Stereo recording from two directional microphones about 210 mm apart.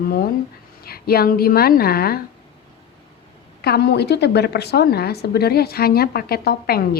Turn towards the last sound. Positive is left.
turn(degrees=45)  # may be behind; listen again after turning